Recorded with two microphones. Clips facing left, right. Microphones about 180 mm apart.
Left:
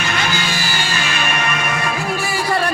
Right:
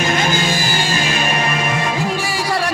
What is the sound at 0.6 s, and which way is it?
Music, 15° right (ahead or behind).